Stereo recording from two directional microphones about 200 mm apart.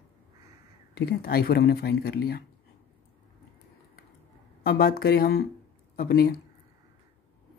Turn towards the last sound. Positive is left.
turn(degrees=50)  # may be behind; listen again after turning